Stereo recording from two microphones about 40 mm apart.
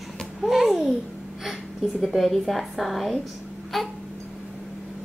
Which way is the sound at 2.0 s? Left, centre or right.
Centre.